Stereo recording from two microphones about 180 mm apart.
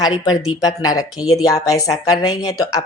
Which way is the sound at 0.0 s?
20° left (ahead or behind).